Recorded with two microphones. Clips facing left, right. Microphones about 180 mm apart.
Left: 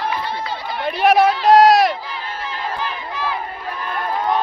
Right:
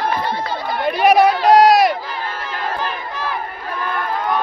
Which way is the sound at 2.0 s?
50° right (ahead or behind).